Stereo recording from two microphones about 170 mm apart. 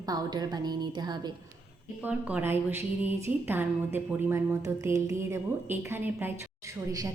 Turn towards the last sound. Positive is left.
turn(degrees=-10)  # may be behind; listen again after turning